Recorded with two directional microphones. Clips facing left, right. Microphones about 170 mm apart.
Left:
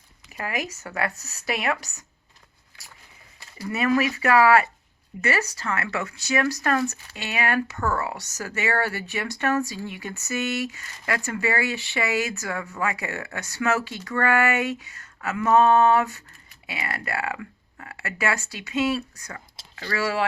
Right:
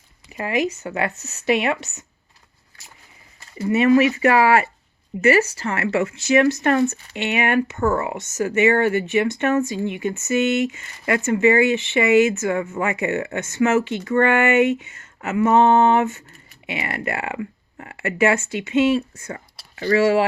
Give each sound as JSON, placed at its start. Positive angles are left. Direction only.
{"t": 0.3, "sound": "speech", "side_deg": -20}
{"t": 3.6, "sound": "speech", "side_deg": -25}